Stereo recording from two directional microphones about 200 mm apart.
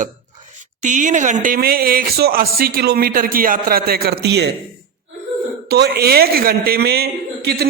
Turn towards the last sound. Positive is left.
turn(degrees=-55)  # may be behind; listen again after turning